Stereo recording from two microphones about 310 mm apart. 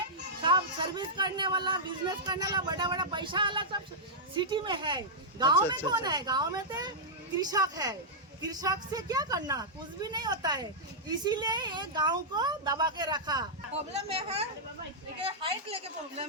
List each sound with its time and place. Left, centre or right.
0.4 s speech: centre